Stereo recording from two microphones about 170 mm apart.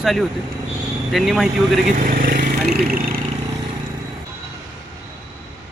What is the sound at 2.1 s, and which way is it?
Speech, 55° right (ahead or behind).